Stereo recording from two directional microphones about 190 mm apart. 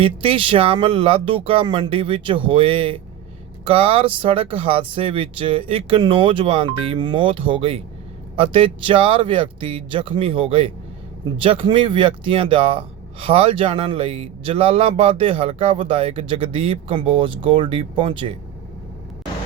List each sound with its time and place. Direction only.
0.0 s speech: 30° right (ahead or behind)